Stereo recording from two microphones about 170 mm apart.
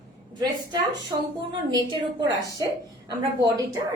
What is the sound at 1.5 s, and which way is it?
Speech, 25° right (ahead or behind).